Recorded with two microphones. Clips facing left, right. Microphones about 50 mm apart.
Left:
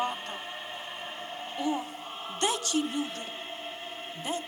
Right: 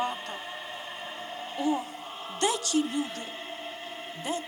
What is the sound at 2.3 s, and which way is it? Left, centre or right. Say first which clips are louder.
Music: right 2 dB; left.